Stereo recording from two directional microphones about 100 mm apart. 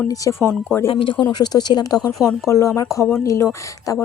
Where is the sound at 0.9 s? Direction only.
60° left (ahead or behind).